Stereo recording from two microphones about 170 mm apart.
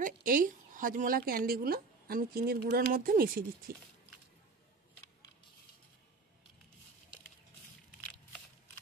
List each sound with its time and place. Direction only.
0.0 s a woman's voice: 55° right (ahead or behind)